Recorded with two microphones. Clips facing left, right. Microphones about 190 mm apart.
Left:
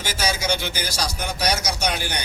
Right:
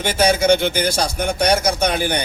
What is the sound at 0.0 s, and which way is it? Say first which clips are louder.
A man's voice: right 10 dB; 55° right (ahead or behind).